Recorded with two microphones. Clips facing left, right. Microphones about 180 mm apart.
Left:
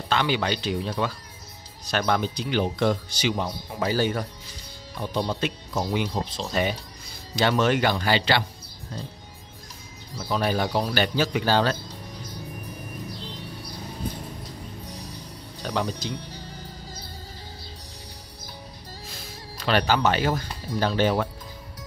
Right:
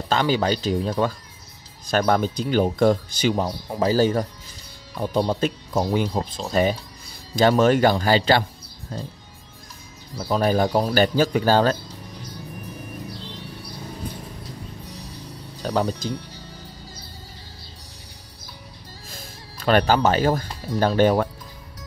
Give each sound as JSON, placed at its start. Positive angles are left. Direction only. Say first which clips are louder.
{"t": 0.1, "sound": "speech", "louder": "right 4 dB", "side_deg": -40}
{"t": 10.1, "sound": "speech", "louder": "right 5 dB", "side_deg": -40}
{"t": 15.6, "sound": "speech", "louder": "right 5 dB", "side_deg": -40}
{"t": 19.0, "sound": "speech", "louder": "right 1 dB", "side_deg": -50}